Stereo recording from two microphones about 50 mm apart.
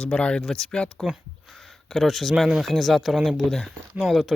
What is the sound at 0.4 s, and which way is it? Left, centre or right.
Speech, centre.